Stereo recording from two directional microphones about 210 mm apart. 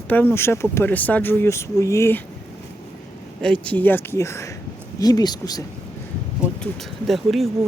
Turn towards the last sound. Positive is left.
turn(degrees=0)  # may be behind; listen again after turning